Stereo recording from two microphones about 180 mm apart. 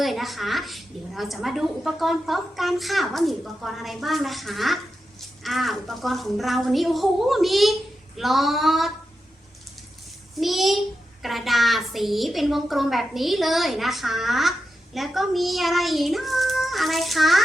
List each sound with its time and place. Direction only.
0.0 s a woman's voice: centre (ahead or behind)
10.4 s a woman's voice: centre (ahead or behind)